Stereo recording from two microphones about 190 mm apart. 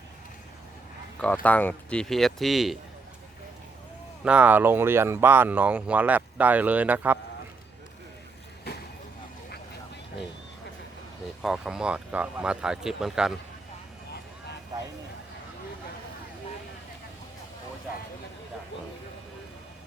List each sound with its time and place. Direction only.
1.2 s speech: 10° left (ahead or behind)
4.2 s speech: 5° right (ahead or behind)
8.7 s vehicle: 55° left (ahead or behind)
11.4 s speech: 5° right (ahead or behind)
14.7 s a sound: 20° right (ahead or behind)